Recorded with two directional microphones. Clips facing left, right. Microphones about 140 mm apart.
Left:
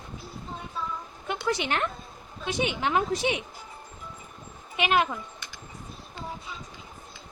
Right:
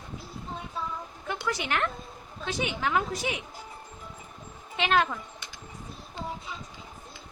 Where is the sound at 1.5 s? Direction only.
25° left (ahead or behind).